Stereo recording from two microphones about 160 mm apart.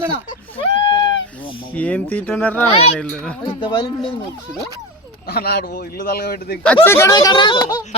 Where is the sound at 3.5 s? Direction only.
30° left (ahead or behind).